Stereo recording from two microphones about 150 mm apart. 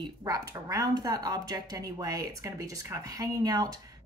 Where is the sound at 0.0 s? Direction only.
25° right (ahead or behind).